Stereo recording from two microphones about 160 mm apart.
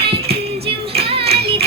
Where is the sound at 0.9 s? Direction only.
40° right (ahead or behind).